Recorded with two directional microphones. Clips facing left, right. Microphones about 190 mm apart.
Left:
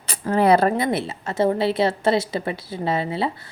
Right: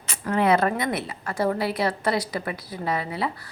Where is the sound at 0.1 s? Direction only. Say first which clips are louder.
Left 4 dB; 35° left (ahead or behind).